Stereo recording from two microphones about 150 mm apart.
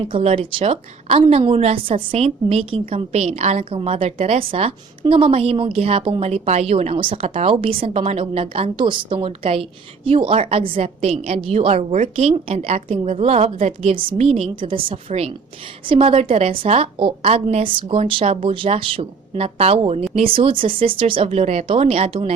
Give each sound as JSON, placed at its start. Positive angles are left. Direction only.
{"t": 0.1, "sound": "a woman's voice", "side_deg": -40}